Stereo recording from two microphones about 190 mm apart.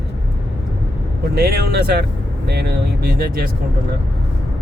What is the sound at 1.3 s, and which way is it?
Speech, 55° right (ahead or behind).